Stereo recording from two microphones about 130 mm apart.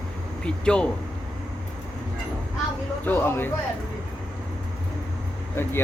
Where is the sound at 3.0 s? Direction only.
15° left (ahead or behind).